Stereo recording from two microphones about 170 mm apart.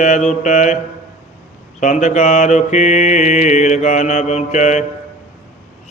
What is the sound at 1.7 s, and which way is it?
Mantra, 45° left (ahead or behind).